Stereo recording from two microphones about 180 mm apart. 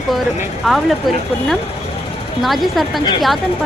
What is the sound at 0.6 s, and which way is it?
Speech, centre (ahead or behind).